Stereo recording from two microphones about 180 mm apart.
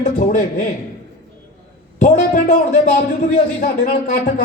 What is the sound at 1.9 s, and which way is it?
Speech, 40° left (ahead or behind).